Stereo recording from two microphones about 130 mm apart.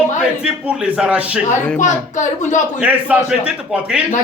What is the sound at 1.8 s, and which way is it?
Speech, 70° left (ahead or behind).